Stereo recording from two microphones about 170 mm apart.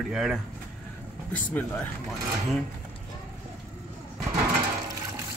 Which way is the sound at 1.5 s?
10° left (ahead or behind).